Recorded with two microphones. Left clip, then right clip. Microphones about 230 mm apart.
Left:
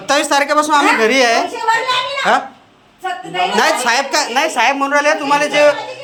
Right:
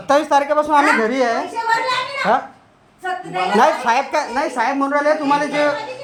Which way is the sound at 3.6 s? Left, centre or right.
Right.